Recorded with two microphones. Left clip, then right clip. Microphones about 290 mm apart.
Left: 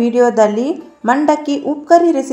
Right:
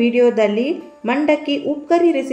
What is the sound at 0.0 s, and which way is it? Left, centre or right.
A woman's voice, left.